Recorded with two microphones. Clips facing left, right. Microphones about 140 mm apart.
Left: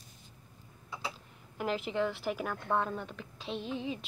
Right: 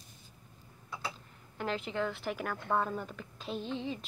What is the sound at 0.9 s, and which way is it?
Speech, 5° left (ahead or behind).